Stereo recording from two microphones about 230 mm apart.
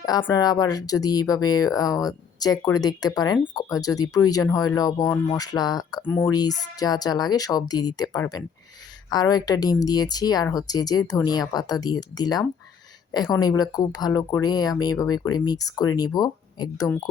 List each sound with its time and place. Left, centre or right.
0.0 s speech: centre
13.1 s a sound: centre
13.4 s speech: centre